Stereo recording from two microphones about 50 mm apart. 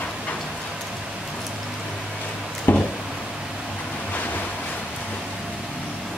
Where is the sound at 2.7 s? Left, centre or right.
Left.